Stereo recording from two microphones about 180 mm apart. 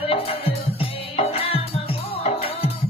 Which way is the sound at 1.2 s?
30° left (ahead or behind).